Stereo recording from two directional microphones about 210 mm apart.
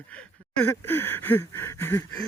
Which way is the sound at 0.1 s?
5° left (ahead or behind).